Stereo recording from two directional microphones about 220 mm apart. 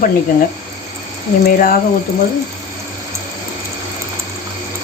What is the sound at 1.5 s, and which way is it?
Speech, 40° left (ahead or behind).